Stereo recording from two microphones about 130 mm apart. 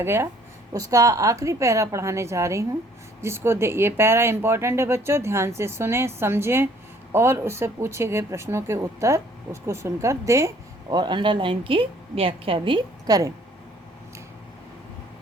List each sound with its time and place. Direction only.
0.0 s speech: 20° right (ahead or behind)